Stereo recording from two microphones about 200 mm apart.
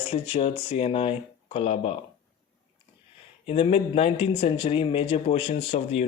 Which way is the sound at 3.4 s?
30° left (ahead or behind).